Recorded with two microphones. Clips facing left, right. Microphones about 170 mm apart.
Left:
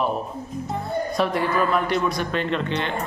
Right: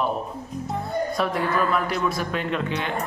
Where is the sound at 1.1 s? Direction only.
Centre (ahead or behind).